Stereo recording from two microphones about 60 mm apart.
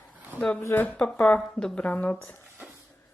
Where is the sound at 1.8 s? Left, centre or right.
Left.